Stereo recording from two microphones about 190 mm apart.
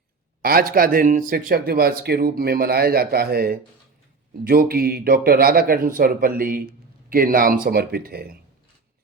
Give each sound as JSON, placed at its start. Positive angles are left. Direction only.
{"t": 0.4, "sound": "speech", "side_deg": -50}